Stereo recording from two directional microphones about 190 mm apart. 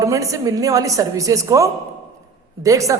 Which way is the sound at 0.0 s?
15° right (ahead or behind).